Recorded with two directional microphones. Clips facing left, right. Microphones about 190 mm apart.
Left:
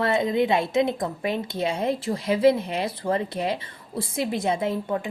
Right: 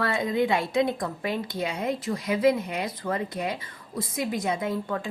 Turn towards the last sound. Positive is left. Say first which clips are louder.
# left 3 dB
turn(degrees=25)  # may be behind; listen again after turning